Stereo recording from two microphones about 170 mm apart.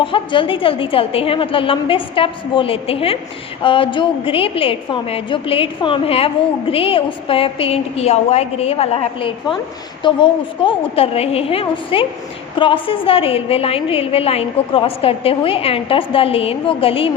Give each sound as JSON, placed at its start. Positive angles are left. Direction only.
{"t": 0.0, "sound": "a woman's voice", "side_deg": 30}